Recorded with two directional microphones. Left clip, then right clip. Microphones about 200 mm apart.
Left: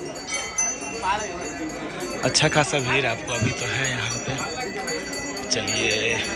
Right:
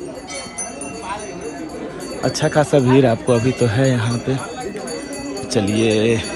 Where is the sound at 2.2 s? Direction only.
5° right (ahead or behind).